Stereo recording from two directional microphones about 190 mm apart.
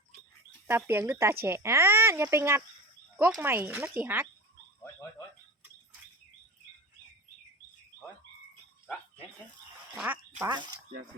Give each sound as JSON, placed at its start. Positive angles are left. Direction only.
{"t": 0.7, "sound": "speech", "side_deg": -15}
{"t": 4.8, "sound": "frog", "side_deg": 15}
{"t": 9.9, "sound": "a sound", "side_deg": -5}
{"t": 10.5, "sound": "speech", "side_deg": -20}